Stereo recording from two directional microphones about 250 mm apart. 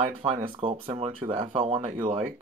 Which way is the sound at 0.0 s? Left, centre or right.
Right.